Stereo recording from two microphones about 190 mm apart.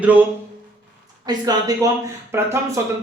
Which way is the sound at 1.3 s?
20° right (ahead or behind).